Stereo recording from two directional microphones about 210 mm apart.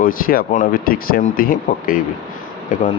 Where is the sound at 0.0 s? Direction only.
40° left (ahead or behind).